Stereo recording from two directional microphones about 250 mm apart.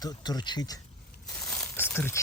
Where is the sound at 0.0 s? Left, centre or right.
Centre.